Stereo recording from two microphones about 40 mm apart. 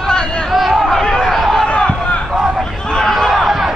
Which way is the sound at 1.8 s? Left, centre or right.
Centre.